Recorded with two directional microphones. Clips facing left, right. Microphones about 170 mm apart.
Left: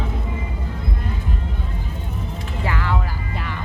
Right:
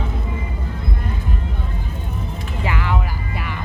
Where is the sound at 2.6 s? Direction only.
15° right (ahead or behind).